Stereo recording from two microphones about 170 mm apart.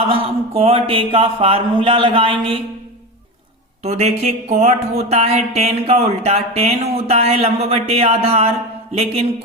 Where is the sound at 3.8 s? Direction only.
40° right (ahead or behind).